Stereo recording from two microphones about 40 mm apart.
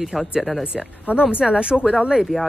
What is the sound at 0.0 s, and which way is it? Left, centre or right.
Speech, centre.